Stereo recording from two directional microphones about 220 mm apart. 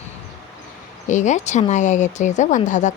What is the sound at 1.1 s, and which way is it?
A woman's voice, 35° left (ahead or behind).